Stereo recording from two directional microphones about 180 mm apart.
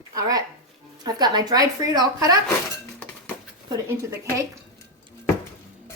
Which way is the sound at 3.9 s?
15° right (ahead or behind).